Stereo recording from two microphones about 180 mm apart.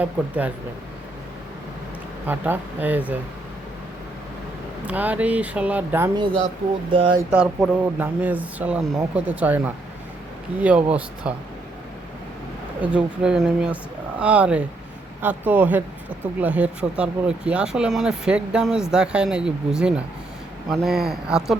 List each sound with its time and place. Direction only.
0.0 s speech: 10° right (ahead or behind)
2.2 s speech: 10° right (ahead or behind)
4.9 s speech: 10° right (ahead or behind)
6.1 s speech: 30° right (ahead or behind)
7.3 s speech: 5° right (ahead or behind)
12.8 s speech: 5° right (ahead or behind)